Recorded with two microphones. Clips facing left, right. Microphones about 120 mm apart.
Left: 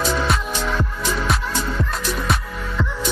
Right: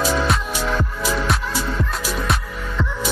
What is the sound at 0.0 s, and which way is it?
Music, 5° right (ahead or behind).